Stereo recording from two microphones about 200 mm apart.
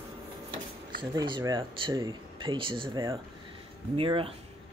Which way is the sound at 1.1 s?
20° right (ahead or behind).